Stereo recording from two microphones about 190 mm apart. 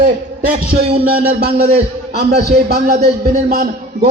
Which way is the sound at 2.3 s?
55° right (ahead or behind).